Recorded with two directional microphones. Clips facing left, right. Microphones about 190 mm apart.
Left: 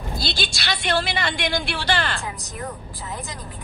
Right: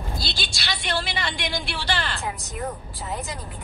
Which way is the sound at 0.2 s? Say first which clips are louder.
Left 4 dB; 55° left (ahead or behind).